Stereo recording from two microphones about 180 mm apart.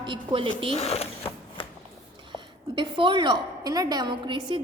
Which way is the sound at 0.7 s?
35° left (ahead or behind).